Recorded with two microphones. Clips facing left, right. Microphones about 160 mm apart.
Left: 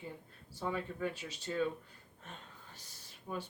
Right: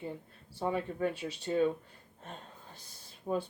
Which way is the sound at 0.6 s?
25° right (ahead or behind).